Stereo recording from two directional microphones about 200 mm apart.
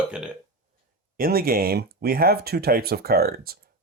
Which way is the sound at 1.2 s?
45° right (ahead or behind).